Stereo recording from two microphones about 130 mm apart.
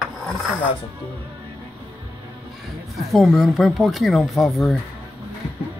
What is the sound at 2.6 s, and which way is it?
A man's voice, centre (ahead or behind).